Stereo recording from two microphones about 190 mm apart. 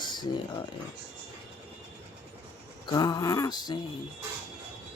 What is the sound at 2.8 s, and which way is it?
Speech, 20° left (ahead or behind).